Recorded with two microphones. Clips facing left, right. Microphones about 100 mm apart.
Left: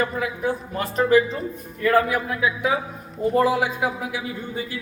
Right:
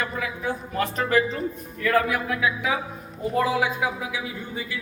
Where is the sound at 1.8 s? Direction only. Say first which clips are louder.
Left 3 dB; 30° left (ahead or behind).